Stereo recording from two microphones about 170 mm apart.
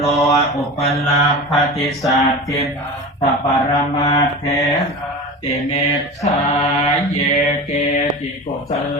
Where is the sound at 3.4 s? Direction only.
20° left (ahead or behind).